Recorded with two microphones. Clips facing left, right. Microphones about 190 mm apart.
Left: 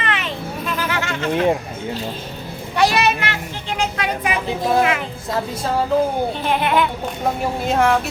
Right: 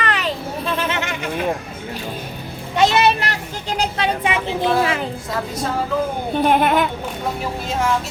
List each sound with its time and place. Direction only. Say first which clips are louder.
0.0 s a sound: right 2 dB; 35° right (ahead or behind); by 1.5 s 15° right (ahead or behind)
2.7 s a child's voice: right 2 dB; 25° right (ahead or behind)
6.3 s a child's voice: right 3 dB; 50° right (ahead or behind)
7.7 s speech: left 4 dB; 60° left (ahead or behind)